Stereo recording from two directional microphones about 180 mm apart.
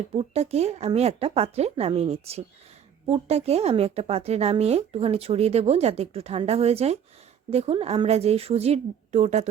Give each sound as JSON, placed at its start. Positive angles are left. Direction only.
{"t": 0.2, "sound": "speech", "side_deg": -35}